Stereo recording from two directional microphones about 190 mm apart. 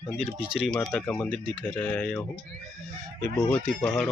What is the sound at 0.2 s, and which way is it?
Speech, 5° right (ahead or behind).